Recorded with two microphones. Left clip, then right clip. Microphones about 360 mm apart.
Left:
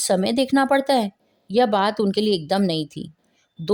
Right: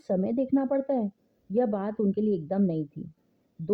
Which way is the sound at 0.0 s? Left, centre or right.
Left.